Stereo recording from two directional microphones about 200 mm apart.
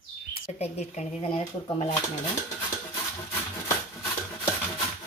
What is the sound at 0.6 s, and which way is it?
Speech, 30° left (ahead or behind).